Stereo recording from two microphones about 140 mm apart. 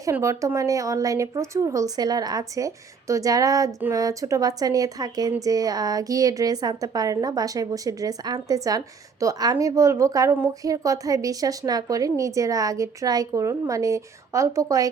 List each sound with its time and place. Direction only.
0.0 s speech: 20° right (ahead or behind)